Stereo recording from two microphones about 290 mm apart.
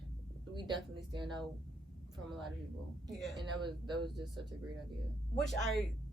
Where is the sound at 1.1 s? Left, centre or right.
Centre.